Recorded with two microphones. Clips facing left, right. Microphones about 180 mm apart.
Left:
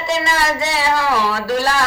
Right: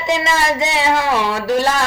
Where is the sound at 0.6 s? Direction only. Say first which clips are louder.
Right 1 dB; 20° right (ahead or behind).